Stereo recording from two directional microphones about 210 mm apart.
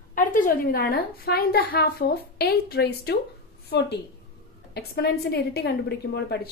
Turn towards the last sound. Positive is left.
turn(degrees=50)  # may be behind; listen again after turning